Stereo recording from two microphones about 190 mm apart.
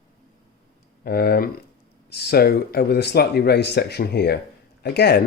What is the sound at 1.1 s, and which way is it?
Speech, 50° left (ahead or behind).